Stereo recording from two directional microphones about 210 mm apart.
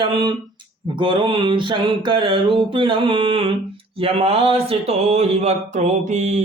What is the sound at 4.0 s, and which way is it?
Speech, 25° right (ahead or behind).